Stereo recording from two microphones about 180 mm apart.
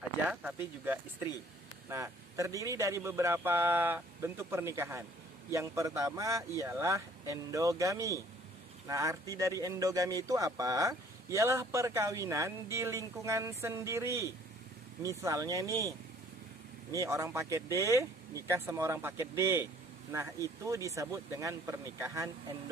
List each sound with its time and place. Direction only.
1.9 s speech: 15° right (ahead or behind)